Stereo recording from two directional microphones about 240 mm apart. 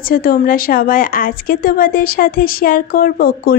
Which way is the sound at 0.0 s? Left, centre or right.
Left.